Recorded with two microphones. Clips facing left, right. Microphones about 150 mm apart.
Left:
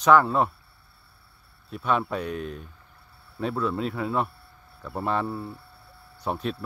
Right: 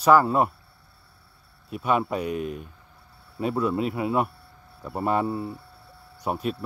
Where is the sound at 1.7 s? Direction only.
10° right (ahead or behind).